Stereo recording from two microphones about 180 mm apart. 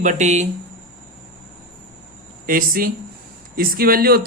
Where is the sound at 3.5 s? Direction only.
55° right (ahead or behind).